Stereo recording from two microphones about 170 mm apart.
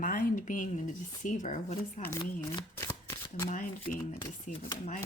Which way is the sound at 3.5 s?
50° left (ahead or behind).